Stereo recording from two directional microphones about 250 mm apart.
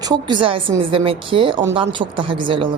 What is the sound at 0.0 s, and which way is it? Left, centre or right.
A woman's voice, centre.